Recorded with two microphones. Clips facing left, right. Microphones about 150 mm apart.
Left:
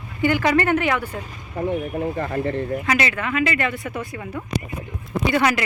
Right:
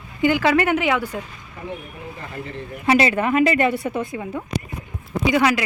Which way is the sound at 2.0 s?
60° left (ahead or behind).